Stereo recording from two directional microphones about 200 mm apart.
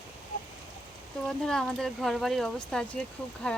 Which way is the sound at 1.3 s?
5° left (ahead or behind).